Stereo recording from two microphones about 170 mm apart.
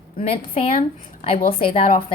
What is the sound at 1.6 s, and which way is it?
Speech, 30° left (ahead or behind).